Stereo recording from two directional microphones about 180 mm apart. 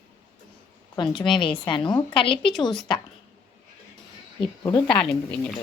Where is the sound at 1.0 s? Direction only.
25° left (ahead or behind).